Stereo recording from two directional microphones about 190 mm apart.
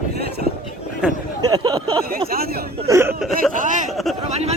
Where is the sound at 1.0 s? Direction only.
5° right (ahead or behind).